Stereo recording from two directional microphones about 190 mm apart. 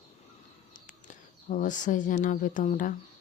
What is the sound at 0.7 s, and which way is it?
Speech, 40° left (ahead or behind).